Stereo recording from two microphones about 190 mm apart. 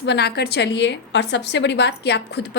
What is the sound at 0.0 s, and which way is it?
A woman's voice, 60° left (ahead or behind).